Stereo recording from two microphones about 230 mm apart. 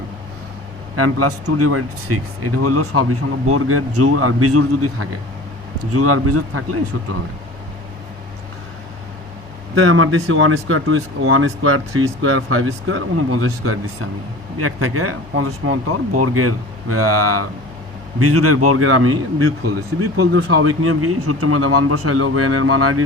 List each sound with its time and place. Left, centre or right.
0.9 s speech: right
9.7 s speech: right